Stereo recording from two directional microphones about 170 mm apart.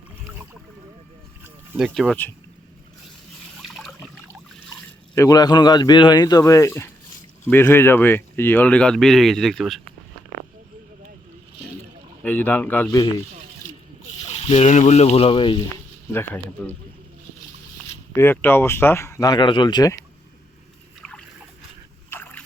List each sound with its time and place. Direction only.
1.7 s speech: centre (ahead or behind)
3.6 s a sound: centre (ahead or behind)
5.1 s speech: 20° left (ahead or behind); by 9.8 s centre (ahead or behind)
12.2 s speech: 10° left (ahead or behind)
13.0 s speech: 25° left (ahead or behind)
14.2 s speech: 40° left (ahead or behind)
16.1 s speech: 10° left (ahead or behind)
18.2 s speech: 15° left (ahead or behind)
22.1 s boat: 10° left (ahead or behind)